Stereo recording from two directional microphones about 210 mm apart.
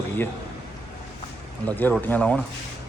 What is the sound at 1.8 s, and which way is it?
Speech, 10° left (ahead or behind).